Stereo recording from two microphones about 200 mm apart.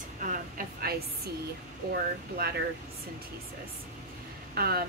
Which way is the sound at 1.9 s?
50° right (ahead or behind).